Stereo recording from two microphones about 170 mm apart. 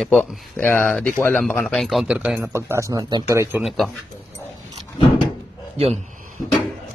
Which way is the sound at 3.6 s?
Centre (ahead or behind).